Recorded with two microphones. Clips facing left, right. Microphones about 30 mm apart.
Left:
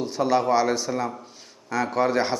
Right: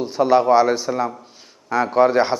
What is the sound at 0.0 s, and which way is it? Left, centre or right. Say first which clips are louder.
A man's voice: right 6 dB; centre.